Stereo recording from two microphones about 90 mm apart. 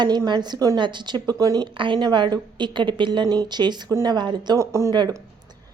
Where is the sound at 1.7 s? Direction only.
65° right (ahead or behind).